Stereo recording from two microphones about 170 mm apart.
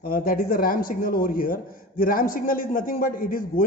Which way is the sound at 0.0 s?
60° left (ahead or behind).